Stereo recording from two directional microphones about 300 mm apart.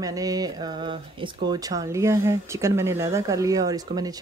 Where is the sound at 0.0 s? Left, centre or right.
Centre.